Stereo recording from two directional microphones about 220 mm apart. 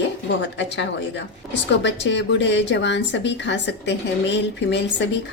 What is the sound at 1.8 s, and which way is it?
A woman's voice, 55° left (ahead or behind).